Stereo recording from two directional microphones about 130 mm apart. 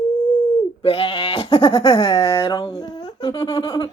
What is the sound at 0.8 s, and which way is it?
Speech, 45° left (ahead or behind).